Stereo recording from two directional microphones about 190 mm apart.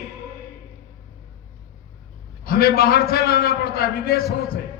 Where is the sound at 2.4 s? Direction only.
50° left (ahead or behind).